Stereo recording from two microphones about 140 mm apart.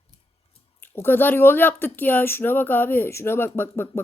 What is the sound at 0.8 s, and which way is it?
Speech, 15° left (ahead or behind).